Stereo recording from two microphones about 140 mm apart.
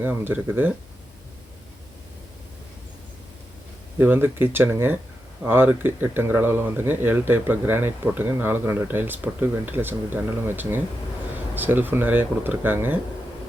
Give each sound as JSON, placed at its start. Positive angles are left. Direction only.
{"t": 0.0, "sound": "speech", "side_deg": -15}
{"t": 4.0, "sound": "speech", "side_deg": -15}